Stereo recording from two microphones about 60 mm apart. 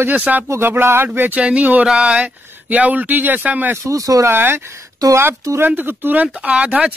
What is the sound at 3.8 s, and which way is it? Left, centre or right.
Speech, right.